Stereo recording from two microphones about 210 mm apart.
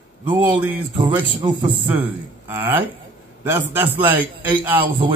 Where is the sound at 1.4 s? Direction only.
20° right (ahead or behind).